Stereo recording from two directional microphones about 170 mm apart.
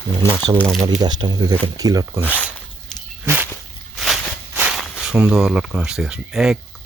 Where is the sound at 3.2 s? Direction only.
10° right (ahead or behind).